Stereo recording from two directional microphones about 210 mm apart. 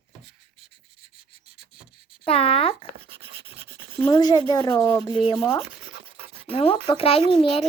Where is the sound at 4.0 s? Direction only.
20° left (ahead or behind).